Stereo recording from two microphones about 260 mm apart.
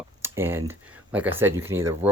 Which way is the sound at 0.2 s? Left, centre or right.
Centre.